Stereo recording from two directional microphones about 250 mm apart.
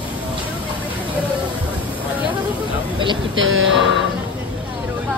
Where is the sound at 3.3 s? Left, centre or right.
Right.